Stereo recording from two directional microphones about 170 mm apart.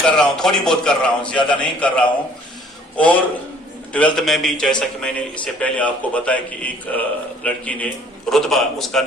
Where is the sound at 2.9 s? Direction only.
10° left (ahead or behind).